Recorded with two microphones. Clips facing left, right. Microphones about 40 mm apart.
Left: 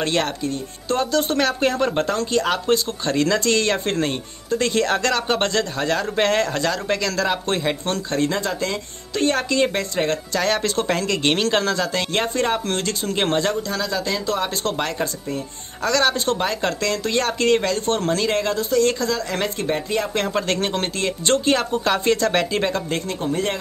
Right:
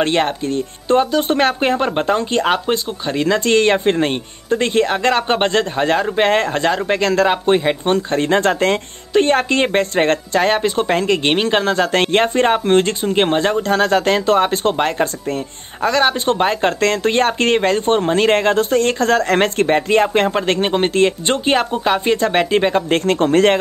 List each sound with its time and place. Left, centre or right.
0.0 s speech: right
2.6 s speech: centre
8.4 s speech: right
9.1 s speech: right
11.8 s speech: right
13.6 s speech: right
15.8 s speech: right
18.2 s speech: right
20.6 s speech: right
23.1 s speech: right